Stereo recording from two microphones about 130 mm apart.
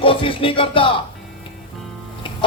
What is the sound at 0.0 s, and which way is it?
Music, 45° left (ahead or behind).